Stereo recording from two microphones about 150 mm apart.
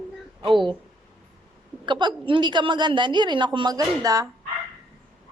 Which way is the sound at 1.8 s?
30° right (ahead or behind).